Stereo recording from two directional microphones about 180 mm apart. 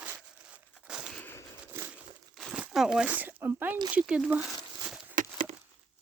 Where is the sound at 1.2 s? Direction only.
15° left (ahead or behind).